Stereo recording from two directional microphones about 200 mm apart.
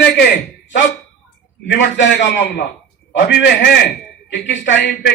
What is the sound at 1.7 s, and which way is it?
A man's voice, 60° left (ahead or behind).